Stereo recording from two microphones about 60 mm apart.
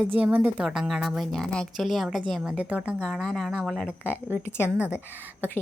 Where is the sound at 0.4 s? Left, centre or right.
Centre.